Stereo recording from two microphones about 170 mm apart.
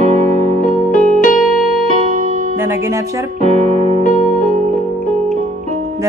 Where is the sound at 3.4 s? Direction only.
40° right (ahead or behind).